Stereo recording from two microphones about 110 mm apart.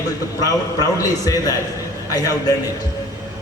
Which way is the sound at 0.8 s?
35° left (ahead or behind).